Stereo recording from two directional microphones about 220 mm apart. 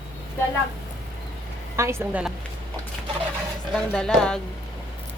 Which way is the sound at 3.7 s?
5° left (ahead or behind).